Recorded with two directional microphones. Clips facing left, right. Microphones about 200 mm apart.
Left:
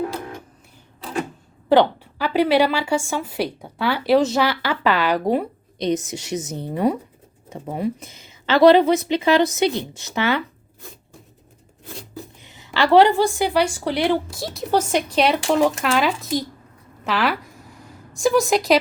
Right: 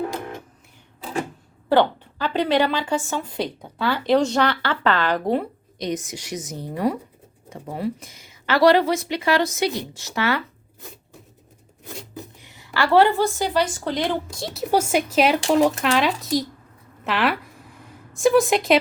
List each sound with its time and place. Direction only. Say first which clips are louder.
1.7 s a woman's voice: left 2 dB; 10° left (ahead or behind)
5.8 s speech: left 5 dB; 25° left (ahead or behind)
12.4 s a woman's voice: left 3 dB; 20° left (ahead or behind); by 14.6 s centre (ahead or behind)
14.7 s speech: even; 10° right (ahead or behind)
17.0 s a sound: even; centre (ahead or behind)
18.2 s speech: right 1 dB; centre (ahead or behind)